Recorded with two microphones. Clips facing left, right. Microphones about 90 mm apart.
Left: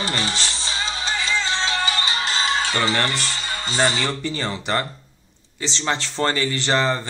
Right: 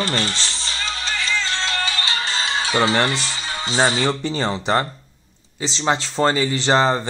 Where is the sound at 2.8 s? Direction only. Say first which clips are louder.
Right 3 dB; 20° right (ahead or behind).